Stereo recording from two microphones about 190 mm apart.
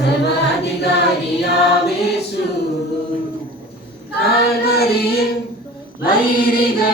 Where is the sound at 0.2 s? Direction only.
60° left (ahead or behind).